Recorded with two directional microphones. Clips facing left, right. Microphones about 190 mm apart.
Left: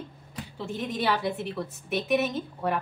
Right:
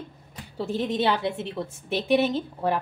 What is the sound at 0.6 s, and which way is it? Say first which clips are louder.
Speech: right 4 dB; 30° right (ahead or behind).